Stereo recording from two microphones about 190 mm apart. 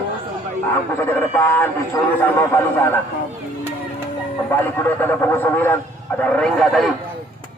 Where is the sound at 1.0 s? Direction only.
10° left (ahead or behind).